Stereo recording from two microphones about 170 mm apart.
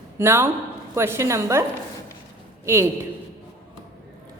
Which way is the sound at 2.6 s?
15° right (ahead or behind).